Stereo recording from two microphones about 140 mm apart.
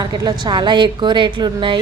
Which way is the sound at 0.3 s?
30° right (ahead or behind).